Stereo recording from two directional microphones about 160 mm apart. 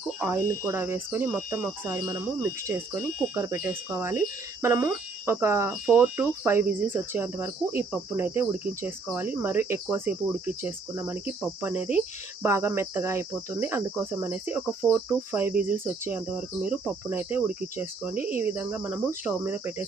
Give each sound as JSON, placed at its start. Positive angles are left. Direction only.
{"t": 0.2, "sound": "cricket", "side_deg": -15}
{"t": 11.1, "sound": "cricket", "side_deg": -10}